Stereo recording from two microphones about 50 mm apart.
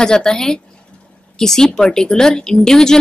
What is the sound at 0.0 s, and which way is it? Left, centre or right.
A woman's voice, centre.